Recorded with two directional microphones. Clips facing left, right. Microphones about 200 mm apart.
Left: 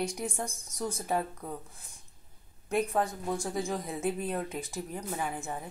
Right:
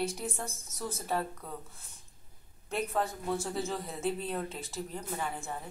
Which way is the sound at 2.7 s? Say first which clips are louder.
Left 3 dB; 15° left (ahead or behind).